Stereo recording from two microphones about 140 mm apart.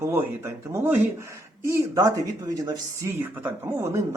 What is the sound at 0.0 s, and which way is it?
Speech, 20° right (ahead or behind).